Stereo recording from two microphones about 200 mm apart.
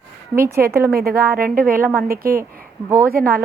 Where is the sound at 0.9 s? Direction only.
50° right (ahead or behind).